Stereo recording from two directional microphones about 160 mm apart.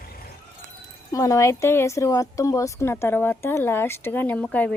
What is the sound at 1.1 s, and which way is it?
A woman's voice, 20° left (ahead or behind).